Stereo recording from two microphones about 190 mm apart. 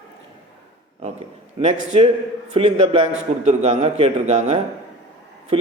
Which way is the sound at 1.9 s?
35° right (ahead or behind).